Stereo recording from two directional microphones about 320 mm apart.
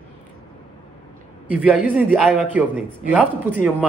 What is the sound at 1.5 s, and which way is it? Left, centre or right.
A man's voice, centre.